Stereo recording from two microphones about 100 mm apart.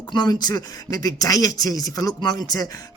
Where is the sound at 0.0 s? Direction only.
45° left (ahead or behind).